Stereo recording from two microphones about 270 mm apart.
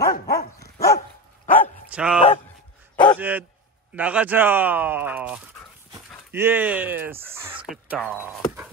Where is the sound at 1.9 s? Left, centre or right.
Centre.